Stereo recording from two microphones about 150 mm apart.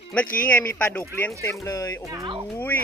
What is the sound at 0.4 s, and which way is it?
Speech, 10° left (ahead or behind).